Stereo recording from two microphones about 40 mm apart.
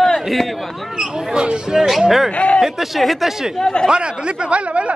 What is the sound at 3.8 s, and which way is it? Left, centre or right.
A man's voice, right.